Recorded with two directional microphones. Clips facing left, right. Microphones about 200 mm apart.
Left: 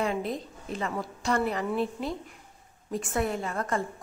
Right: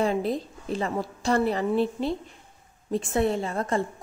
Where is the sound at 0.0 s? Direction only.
35° right (ahead or behind).